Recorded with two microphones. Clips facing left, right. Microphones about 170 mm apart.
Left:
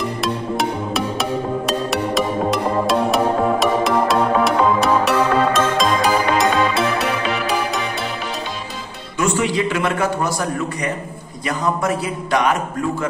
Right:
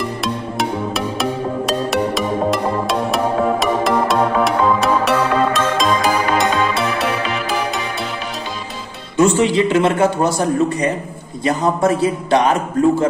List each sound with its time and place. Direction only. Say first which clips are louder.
0.2 s music: even; centre (ahead or behind)
9.1 s a man's voice: right 5 dB; 25° right (ahead or behind)